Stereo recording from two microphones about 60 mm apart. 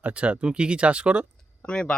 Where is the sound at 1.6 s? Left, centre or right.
Centre.